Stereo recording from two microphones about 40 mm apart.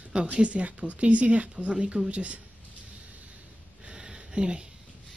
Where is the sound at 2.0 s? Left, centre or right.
Right.